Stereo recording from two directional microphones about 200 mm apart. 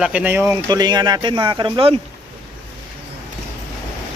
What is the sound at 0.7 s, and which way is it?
Speech, 20° right (ahead or behind).